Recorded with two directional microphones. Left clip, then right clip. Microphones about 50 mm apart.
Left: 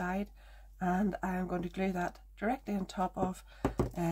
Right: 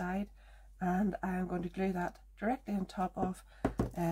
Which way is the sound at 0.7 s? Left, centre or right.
Left.